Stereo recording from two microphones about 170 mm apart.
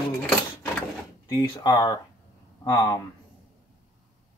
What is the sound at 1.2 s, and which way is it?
Speech, 25° left (ahead or behind).